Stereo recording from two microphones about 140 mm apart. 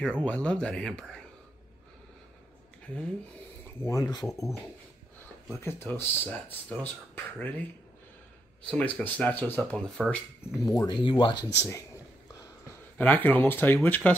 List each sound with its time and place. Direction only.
0.0 s speech: 10° left (ahead or behind)
2.8 s speech: 5° left (ahead or behind)
3.6 s speech: 20° left (ahead or behind)
5.6 s speech: 15° left (ahead or behind)
8.6 s speech: 10° left (ahead or behind)
10.7 s speech: 30° left (ahead or behind)
11.5 s speech: 20° left (ahead or behind)
12.9 s speech: 10° left (ahead or behind)